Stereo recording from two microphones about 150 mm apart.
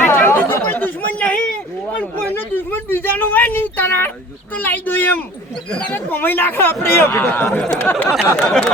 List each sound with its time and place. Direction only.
0.0 s chatter: 15° left (ahead or behind)
4.5 s speech: 10° left (ahead or behind)
8.1 s a sound: 5° left (ahead or behind)